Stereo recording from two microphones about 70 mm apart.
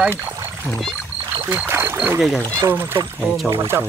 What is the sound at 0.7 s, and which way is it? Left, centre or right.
Speech, centre.